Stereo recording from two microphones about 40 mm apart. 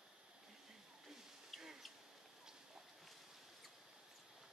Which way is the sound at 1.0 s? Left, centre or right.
Centre.